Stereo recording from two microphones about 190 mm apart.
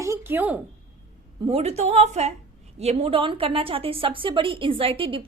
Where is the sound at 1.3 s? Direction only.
30° right (ahead or behind).